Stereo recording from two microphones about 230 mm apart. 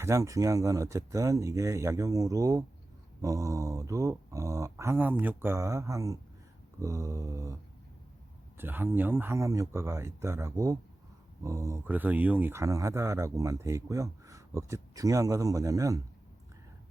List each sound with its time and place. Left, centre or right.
0.0 s speech: centre
8.5 s speech: centre